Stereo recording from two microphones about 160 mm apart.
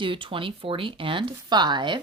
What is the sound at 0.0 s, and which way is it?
Speech, 30° right (ahead or behind).